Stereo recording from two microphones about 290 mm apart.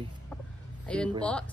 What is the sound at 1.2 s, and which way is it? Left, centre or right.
Speech, centre.